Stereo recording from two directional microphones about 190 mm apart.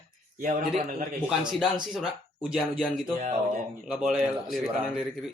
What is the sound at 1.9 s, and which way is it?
Speech, 5° right (ahead or behind).